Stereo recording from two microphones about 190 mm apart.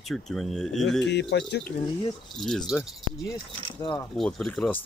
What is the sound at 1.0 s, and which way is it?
Speech, 65° left (ahead or behind).